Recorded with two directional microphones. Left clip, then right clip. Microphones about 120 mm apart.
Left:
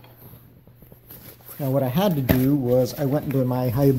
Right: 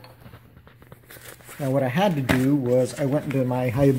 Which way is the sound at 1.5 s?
Centre (ahead or behind).